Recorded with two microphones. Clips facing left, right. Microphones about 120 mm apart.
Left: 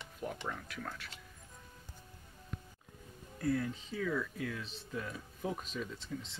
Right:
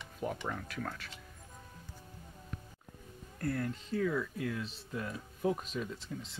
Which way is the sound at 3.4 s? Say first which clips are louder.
Left 1 dB; 5° left (ahead or behind).